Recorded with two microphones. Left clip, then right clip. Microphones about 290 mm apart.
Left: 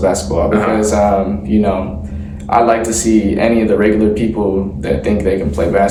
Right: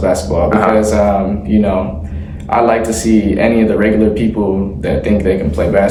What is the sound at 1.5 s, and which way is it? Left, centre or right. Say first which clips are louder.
Speech: right 1 dB; centre.